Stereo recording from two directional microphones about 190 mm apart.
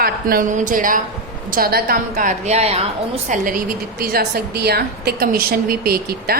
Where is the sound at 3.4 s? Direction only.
50° right (ahead or behind).